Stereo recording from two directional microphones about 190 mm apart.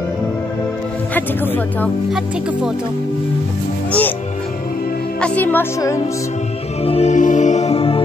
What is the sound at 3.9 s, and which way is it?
Music, 10° left (ahead or behind).